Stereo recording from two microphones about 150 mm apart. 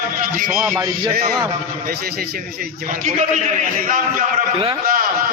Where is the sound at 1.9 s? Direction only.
90° right; by 3.7 s 50° right (ahead or behind).